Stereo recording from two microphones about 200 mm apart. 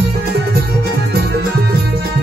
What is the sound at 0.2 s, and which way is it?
Music, 50° right (ahead or behind).